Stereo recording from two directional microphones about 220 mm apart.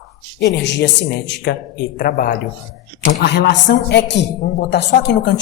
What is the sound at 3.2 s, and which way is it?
Speech, 50° left (ahead or behind).